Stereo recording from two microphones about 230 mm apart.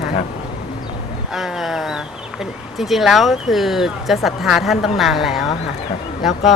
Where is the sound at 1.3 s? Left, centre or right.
Centre.